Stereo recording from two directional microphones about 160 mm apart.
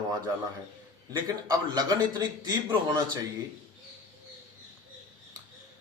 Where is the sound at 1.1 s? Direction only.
25° right (ahead or behind).